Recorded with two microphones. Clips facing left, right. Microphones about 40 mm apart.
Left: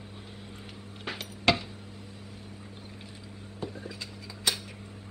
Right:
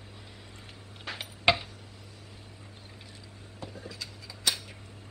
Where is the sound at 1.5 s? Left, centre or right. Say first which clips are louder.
Even; centre.